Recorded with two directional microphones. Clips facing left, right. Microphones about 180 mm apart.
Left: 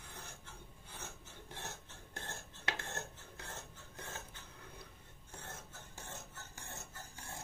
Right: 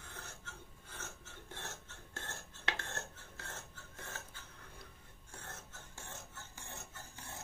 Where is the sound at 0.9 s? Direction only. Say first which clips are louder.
Even; 15° left (ahead or behind).